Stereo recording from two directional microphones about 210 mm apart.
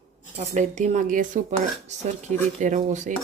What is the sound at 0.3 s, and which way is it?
Speech, 35° right (ahead or behind).